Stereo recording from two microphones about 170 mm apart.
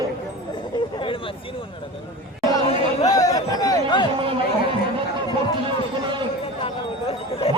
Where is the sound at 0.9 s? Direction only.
30° left (ahead or behind).